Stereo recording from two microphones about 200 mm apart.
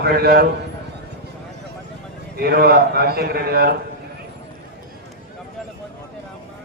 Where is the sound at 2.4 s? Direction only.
50° right (ahead or behind).